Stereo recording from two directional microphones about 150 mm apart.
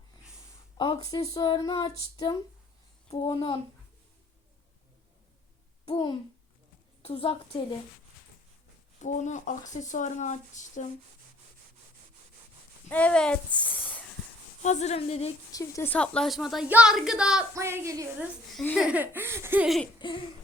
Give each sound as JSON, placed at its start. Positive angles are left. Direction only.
{"t": 0.8, "sound": "a woman's voice", "side_deg": 25}
{"t": 5.8, "sound": "a child's voice", "side_deg": 35}
{"t": 9.0, "sound": "speech", "side_deg": 55}
{"t": 12.9, "sound": "speech", "side_deg": 10}
{"t": 14.6, "sound": "speech", "side_deg": 50}
{"t": 15.5, "sound": "speech", "side_deg": 20}
{"t": 15.9, "sound": "speech", "side_deg": 5}
{"t": 17.5, "sound": "a sound", "side_deg": -20}
{"t": 18.8, "sound": "speech", "side_deg": -10}
{"t": 19.6, "sound": "speech", "side_deg": 0}
{"t": 20.0, "sound": "a sound", "side_deg": 30}